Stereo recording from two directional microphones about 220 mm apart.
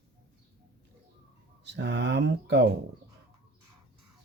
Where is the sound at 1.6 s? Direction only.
50° right (ahead or behind).